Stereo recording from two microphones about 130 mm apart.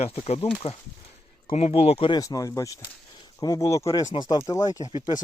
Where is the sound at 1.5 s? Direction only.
55° left (ahead or behind).